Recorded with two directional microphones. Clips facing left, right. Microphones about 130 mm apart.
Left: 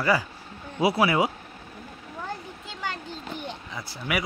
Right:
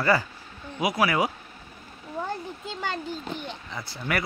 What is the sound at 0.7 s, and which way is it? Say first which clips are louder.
Speech: left 2 dB; 30° left (ahead or behind).